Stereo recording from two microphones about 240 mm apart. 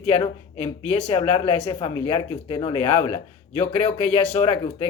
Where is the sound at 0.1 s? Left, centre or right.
Left.